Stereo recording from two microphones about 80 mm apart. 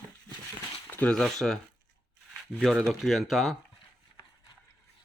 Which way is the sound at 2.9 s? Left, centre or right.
Centre.